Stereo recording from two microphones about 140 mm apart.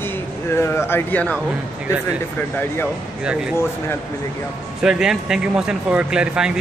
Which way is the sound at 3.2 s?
5° right (ahead or behind).